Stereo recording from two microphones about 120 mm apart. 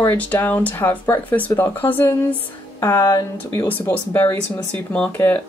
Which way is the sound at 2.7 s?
30° left (ahead or behind).